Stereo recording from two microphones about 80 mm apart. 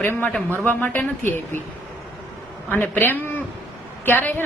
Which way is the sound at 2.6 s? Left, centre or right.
Left.